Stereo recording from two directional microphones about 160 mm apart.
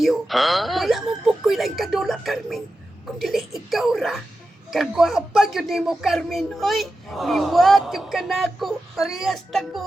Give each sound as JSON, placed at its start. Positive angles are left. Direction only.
{"t": 0.0, "sound": "speech", "side_deg": 0}